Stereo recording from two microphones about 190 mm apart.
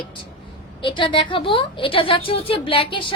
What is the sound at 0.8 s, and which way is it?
A woman's voice, 25° left (ahead or behind).